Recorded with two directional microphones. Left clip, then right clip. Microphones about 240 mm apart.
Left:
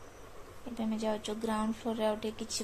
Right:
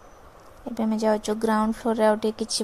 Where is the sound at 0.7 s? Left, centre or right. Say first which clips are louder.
Right 11 dB; right.